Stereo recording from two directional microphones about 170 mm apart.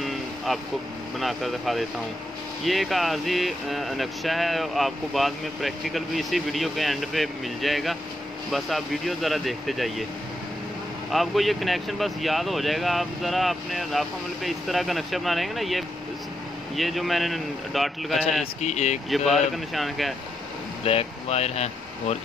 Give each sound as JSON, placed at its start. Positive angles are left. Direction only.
{"t": 1.2, "sound": "speech", "side_deg": 0}
{"t": 11.1, "sound": "speech", "side_deg": 0}
{"t": 18.6, "sound": "speech", "side_deg": 40}
{"t": 19.0, "sound": "speech", "side_deg": 0}
{"t": 20.8, "sound": "speech", "side_deg": 35}